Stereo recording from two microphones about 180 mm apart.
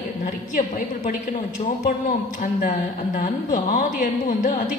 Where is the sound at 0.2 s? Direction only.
45° left (ahead or behind).